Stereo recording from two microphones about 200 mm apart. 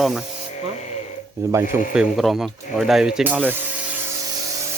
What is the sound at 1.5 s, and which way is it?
Speech, 10° right (ahead or behind).